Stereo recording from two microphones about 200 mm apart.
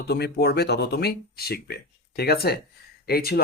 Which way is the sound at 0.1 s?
55° left (ahead or behind).